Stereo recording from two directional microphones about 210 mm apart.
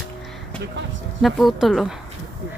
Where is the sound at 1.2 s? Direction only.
Centre (ahead or behind).